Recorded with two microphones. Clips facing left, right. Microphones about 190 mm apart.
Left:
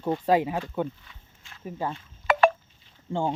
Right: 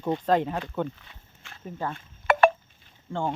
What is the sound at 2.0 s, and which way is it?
Chink, 55° right (ahead or behind).